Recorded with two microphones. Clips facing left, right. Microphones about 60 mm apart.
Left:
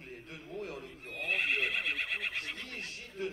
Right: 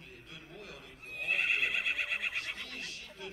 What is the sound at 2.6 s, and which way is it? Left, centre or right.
Speech, left.